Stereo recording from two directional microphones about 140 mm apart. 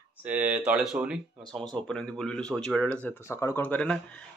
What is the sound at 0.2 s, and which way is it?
Speech, 10° right (ahead or behind).